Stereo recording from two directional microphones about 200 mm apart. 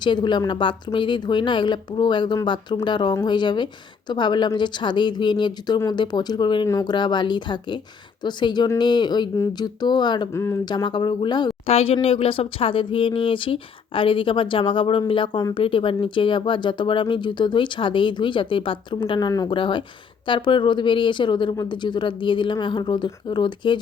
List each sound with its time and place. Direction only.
0.0 s speech: 25° left (ahead or behind)